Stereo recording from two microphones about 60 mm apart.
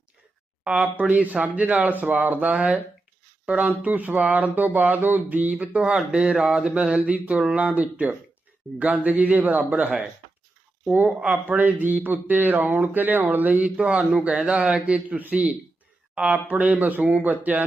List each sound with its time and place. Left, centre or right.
0.6 s speech: centre
11.3 s speech: right